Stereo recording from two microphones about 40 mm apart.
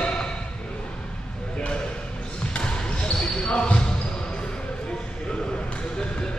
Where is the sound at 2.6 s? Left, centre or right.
Left.